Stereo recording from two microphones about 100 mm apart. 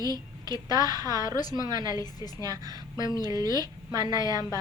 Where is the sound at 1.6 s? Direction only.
45° right (ahead or behind).